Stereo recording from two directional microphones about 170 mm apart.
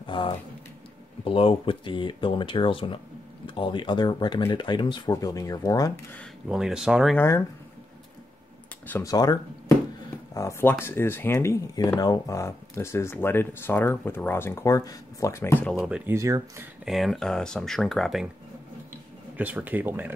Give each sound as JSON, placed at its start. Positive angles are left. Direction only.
{"t": 0.0, "sound": "a sound", "side_deg": 30}
{"t": 1.2, "sound": "speech", "side_deg": 30}
{"t": 6.5, "sound": "speech", "side_deg": -5}
{"t": 7.2, "sound": "speech", "side_deg": 15}
{"t": 8.8, "sound": "speech", "side_deg": 10}
{"t": 9.1, "sound": "speech", "side_deg": 20}
{"t": 15.8, "sound": "speech", "side_deg": -5}
{"t": 16.2, "sound": "speech", "side_deg": -20}
{"t": 16.8, "sound": "speech", "side_deg": 0}
{"t": 19.3, "sound": "speech", "side_deg": -10}